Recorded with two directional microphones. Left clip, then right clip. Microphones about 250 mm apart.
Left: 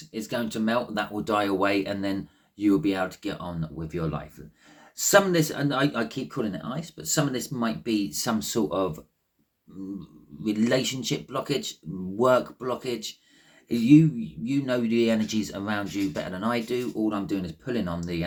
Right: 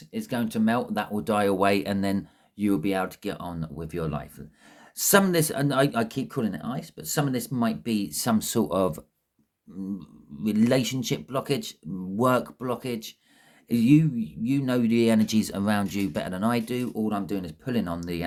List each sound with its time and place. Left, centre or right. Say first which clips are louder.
0.1 s speech: even; right
10.4 s speech: right 1 dB; right